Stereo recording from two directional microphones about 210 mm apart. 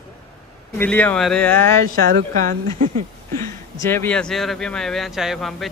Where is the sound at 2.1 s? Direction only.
40° right (ahead or behind).